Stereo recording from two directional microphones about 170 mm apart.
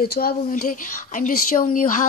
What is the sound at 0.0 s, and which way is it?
Speech, 65° left (ahead or behind).